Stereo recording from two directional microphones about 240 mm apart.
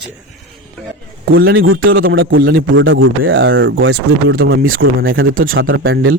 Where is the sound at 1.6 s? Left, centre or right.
Right.